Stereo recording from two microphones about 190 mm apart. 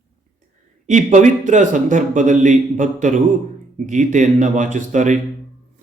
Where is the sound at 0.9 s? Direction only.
40° right (ahead or behind).